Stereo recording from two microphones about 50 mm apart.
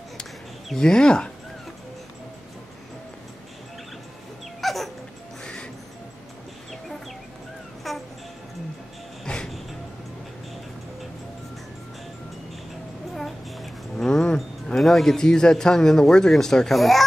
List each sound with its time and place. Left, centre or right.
0.7 s a man's voice: centre
4.6 s dog: centre
5.4 s music: centre
7.8 s music: centre
9.2 s music: centre
13.1 s a sound: centre
14.8 s a man's voice: centre